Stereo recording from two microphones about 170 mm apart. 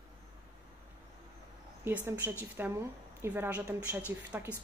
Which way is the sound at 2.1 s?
15° right (ahead or behind).